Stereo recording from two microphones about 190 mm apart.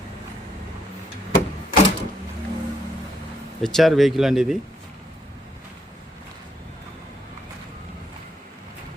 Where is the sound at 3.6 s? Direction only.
Centre (ahead or behind).